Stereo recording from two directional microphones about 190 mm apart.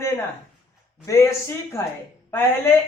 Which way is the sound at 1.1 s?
15° left (ahead or behind).